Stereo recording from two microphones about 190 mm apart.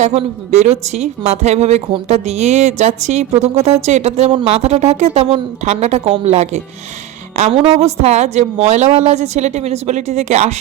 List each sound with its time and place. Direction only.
0.0 s a woman's voice: 35° right (ahead or behind)